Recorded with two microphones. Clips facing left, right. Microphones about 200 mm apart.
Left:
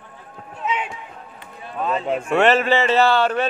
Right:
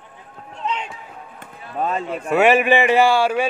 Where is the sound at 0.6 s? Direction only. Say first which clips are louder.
Left 1 dB; 5° left (ahead or behind).